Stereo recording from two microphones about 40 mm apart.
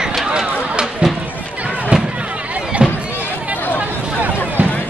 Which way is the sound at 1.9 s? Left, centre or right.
Right.